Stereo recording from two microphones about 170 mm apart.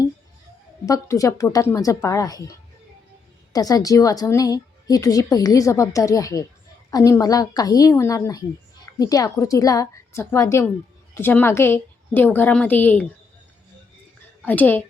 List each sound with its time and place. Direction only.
0.9 s a woman's voice: 20° left (ahead or behind)
3.5 s a woman's voice: 20° left (ahead or behind)
14.4 s a woman's voice: 10° left (ahead or behind)